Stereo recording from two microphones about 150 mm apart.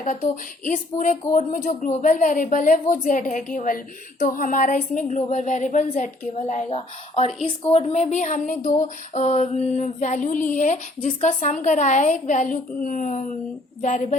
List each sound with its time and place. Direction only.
0.0 s speech: 60° left (ahead or behind)